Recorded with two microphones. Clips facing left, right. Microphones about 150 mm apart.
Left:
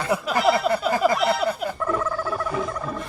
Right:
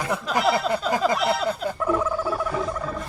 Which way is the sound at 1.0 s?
Centre (ahead or behind).